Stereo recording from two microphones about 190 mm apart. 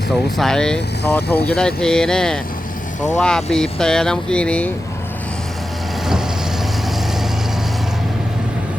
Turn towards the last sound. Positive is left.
turn(degrees=0)  # may be behind; listen again after turning